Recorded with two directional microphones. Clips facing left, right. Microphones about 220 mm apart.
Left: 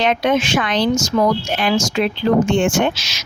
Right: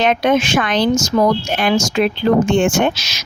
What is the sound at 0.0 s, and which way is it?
Speech, 50° right (ahead or behind).